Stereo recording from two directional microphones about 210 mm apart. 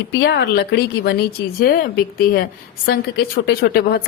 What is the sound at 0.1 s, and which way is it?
A woman's voice, 55° left (ahead or behind).